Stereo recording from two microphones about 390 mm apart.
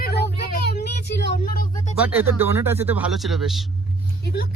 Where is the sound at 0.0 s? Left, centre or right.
Left.